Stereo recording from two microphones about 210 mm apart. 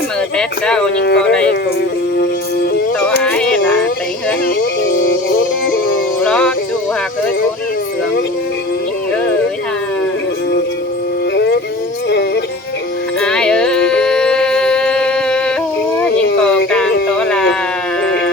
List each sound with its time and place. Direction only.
0.3 s speech: 5° left (ahead or behind)
3.2 s music: 5° left (ahead or behind)
4.9 s music: 40° left (ahead or behind)
6.2 s music: 5° left (ahead or behind)
11.3 s music: 55° left (ahead or behind)
13.2 s a sound: 5° left (ahead or behind)
17.2 s a sound: 5° left (ahead or behind)